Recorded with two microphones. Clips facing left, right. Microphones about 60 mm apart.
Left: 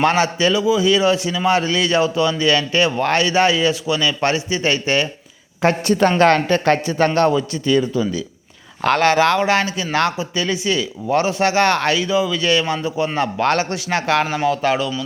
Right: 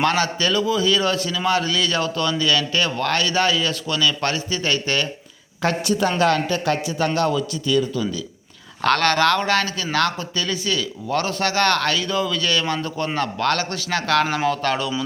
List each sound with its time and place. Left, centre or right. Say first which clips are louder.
0.0 s a man's voice: left 4 dB; left
5.6 s speech: left 5 dB; left
8.8 s a man's voice: left 3 dB; centre
14.3 s speech: left 3 dB; centre